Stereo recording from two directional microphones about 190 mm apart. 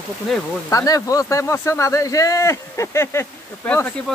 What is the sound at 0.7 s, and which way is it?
Speech, 15° left (ahead or behind).